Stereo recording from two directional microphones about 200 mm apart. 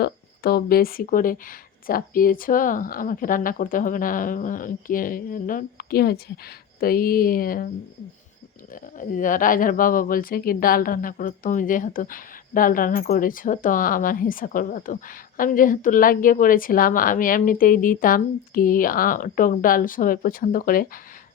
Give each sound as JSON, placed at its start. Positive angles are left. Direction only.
{"t": 0.0, "sound": "speech", "side_deg": 50}
{"t": 8.7, "sound": "speech", "side_deg": 40}